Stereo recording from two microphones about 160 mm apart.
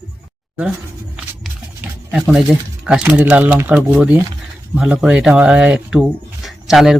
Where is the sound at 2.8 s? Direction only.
5° right (ahead or behind).